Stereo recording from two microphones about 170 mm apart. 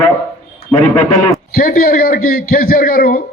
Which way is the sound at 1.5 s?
60° left (ahead or behind).